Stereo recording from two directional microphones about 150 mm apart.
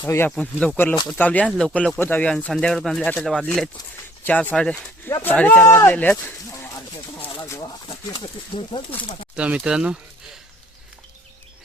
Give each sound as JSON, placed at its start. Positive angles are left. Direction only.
{"t": 0.0, "sound": "speech", "side_deg": 15}
{"t": 7.9, "sound": "speech", "side_deg": 35}
{"t": 9.3, "sound": "speech", "side_deg": -5}